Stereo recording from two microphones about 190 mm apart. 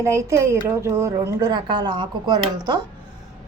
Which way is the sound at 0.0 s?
15° right (ahead or behind).